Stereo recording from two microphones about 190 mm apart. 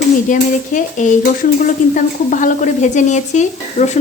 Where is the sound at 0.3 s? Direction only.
40° left (ahead or behind).